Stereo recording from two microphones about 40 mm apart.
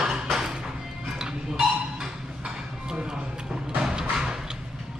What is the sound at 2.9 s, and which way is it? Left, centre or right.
Music, centre.